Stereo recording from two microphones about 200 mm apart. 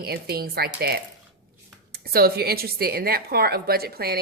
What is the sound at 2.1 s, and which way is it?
A woman's voice, 50° right (ahead or behind).